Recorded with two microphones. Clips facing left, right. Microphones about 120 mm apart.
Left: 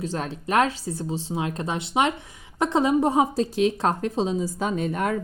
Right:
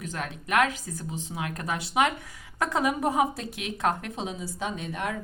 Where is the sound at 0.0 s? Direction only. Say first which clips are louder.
Left 6 dB; 30° left (ahead or behind).